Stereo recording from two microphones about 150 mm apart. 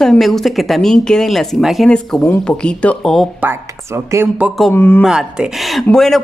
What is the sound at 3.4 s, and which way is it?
Speech, 15° right (ahead or behind).